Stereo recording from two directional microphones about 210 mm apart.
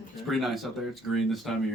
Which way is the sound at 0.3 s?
Centre (ahead or behind).